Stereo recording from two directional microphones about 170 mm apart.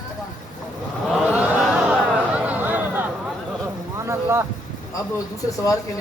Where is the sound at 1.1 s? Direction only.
5° right (ahead or behind).